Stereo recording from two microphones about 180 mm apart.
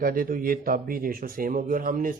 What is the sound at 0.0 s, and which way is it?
A man's voice, 50° right (ahead or behind).